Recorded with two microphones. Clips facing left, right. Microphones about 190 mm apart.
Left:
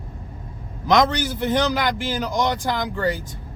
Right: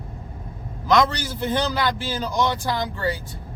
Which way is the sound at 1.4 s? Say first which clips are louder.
Left 1 dB; 15° left (ahead or behind).